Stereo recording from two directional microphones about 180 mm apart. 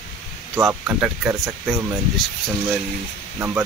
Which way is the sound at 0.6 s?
10° right (ahead or behind).